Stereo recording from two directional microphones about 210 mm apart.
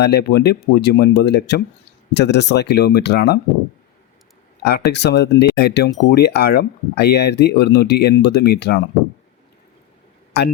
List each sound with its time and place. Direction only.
0.0 s speech: 50° left (ahead or behind)
4.6 s speech: 50° left (ahead or behind)
10.3 s speech: 50° left (ahead or behind)